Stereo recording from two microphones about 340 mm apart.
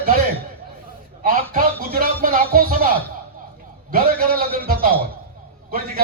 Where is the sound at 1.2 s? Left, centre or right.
Right.